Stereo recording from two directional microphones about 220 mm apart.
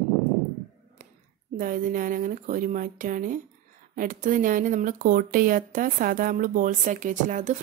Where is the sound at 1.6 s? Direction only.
40° right (ahead or behind).